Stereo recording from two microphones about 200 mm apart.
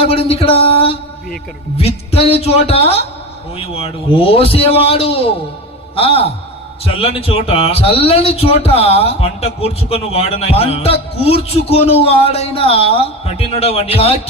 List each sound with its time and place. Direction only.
0.0 s a man's voice: 30° left (ahead or behind)